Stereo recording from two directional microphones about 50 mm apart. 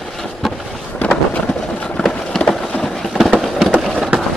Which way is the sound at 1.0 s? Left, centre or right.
Left.